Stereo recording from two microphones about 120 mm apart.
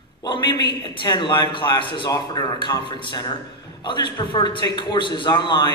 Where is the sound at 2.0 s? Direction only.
30° left (ahead or behind).